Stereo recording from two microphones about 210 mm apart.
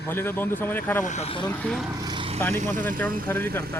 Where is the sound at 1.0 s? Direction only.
35° left (ahead or behind).